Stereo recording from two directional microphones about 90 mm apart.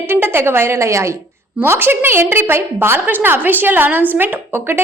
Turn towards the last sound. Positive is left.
turn(degrees=-25)  # may be behind; listen again after turning